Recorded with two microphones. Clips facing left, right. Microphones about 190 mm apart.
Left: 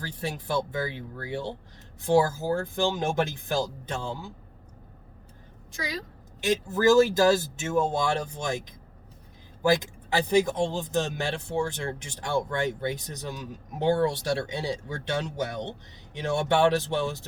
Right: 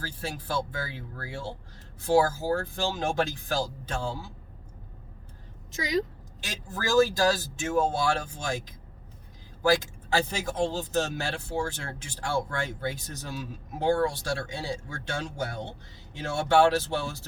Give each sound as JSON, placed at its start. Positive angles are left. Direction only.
{"t": 0.0, "sound": "speech", "side_deg": 20}
{"t": 5.7, "sound": "a woman's voice", "side_deg": -20}
{"t": 6.7, "sound": "speech", "side_deg": 20}